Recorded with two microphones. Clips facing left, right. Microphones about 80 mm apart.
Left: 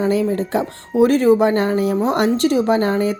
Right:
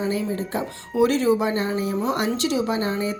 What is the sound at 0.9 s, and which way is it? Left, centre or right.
A woman's voice, left.